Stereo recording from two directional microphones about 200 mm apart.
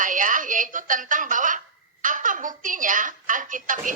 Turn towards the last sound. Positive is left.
turn(degrees=-40)  # may be behind; listen again after turning